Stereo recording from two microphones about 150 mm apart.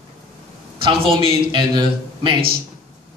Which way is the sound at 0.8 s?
35° right (ahead or behind).